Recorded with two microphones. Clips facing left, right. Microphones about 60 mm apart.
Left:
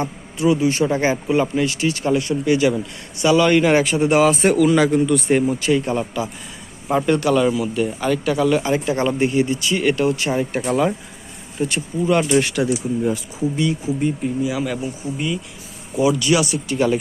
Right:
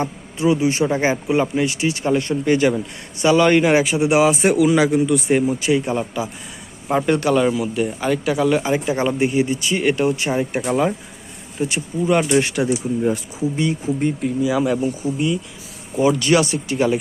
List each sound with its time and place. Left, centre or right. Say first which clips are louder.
0.0 s speech: even; right
2.1 s speech: right 1 dB; right
3.6 s a man's voice: even; centre
10.6 s a man's voice: even; centre; by 13.1 s right
13.8 s speech: right 1 dB; right
16.0 s speech: right 1 dB; right